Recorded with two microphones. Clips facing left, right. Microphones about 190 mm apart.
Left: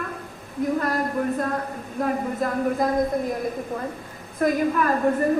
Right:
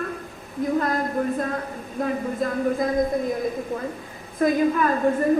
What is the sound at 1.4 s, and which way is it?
A woman's voice, 50° left (ahead or behind).